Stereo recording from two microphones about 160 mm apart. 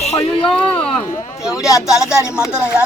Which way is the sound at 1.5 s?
20° left (ahead or behind).